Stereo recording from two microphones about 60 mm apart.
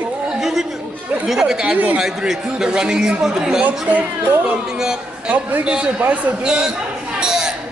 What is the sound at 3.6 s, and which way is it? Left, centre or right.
A man's voice, right.